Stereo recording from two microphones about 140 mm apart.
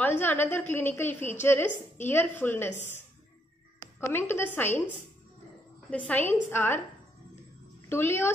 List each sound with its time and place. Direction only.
0.0 s a woman's voice: 15° left (ahead or behind)
5.9 s a woman's voice: 10° left (ahead or behind)
7.9 s a woman's voice: 15° left (ahead or behind)